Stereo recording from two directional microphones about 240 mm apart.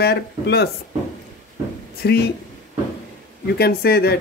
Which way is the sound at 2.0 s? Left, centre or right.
Left.